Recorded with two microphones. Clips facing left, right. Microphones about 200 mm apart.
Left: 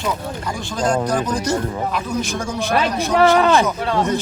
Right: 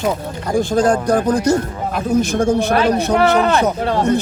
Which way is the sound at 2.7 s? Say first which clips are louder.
Right 4 dB; 60° right (ahead or behind).